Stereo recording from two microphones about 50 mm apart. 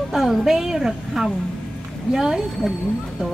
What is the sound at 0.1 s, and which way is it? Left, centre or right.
A woman's voice, centre.